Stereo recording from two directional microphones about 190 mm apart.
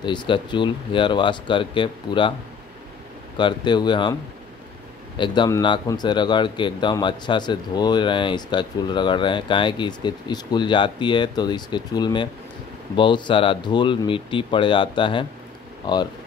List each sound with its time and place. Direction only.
0.0 s a man's voice: 25° left (ahead or behind)
3.3 s a man's voice: 25° left (ahead or behind)